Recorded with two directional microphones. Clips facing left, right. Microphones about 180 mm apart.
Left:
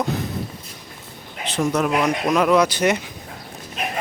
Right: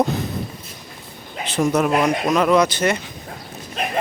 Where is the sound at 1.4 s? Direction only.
10° right (ahead or behind).